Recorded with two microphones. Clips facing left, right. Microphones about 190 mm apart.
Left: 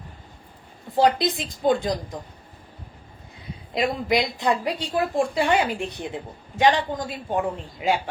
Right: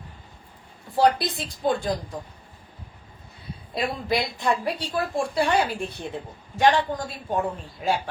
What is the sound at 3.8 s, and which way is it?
A woman's voice, 20° left (ahead or behind).